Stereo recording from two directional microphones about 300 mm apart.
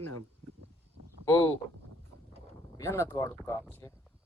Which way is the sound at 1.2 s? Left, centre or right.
Centre.